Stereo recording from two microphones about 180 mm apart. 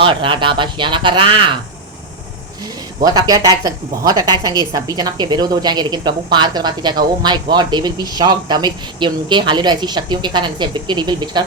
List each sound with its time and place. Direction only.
0.0 s a woman's voice: 30° right (ahead or behind)
3.0 s a woman's voice: 20° right (ahead or behind)